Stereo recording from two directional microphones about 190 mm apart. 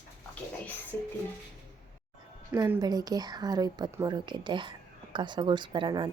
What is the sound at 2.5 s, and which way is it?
Speech, 15° right (ahead or behind).